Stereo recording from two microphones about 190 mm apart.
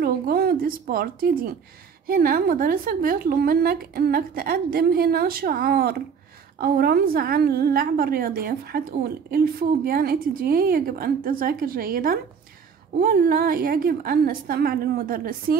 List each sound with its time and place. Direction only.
0.0 s a woman's voice: 50° right (ahead or behind)